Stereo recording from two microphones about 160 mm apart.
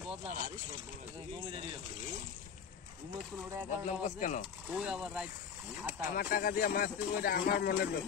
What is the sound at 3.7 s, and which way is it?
Speech, 50° left (ahead or behind).